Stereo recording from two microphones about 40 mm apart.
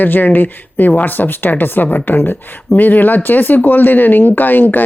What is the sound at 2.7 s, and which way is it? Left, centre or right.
Speech, left.